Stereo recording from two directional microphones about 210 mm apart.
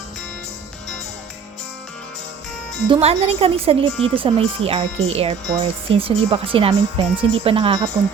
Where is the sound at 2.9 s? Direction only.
30° right (ahead or behind).